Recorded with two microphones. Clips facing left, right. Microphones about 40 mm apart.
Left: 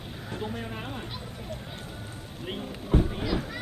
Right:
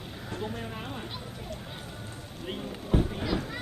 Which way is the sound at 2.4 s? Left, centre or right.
Centre.